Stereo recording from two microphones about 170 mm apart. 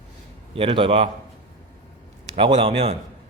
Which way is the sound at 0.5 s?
30° right (ahead or behind).